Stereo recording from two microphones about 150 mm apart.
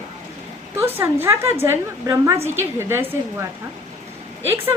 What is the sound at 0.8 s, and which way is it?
A woman's voice, 15° right (ahead or behind).